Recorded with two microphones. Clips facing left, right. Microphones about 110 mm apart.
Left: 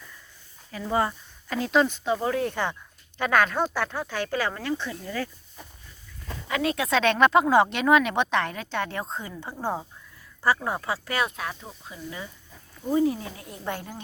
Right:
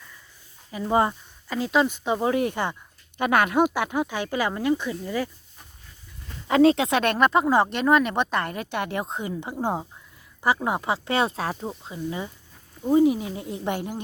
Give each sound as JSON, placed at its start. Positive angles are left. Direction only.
{"t": 0.7, "sound": "speech", "side_deg": -20}
{"t": 1.6, "sound": "speech", "side_deg": -5}
{"t": 2.0, "sound": "speech", "side_deg": -15}
{"t": 6.5, "sound": "speech", "side_deg": -30}
{"t": 7.0, "sound": "speech", "side_deg": -5}